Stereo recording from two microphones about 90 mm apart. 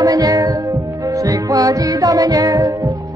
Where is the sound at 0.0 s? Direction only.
40° right (ahead or behind).